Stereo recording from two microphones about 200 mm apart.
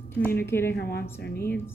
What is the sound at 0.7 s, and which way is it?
Speech, 50° left (ahead or behind).